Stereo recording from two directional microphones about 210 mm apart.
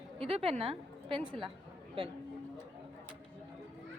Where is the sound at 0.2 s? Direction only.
25° right (ahead or behind).